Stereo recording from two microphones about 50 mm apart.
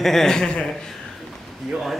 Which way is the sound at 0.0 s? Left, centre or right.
Centre.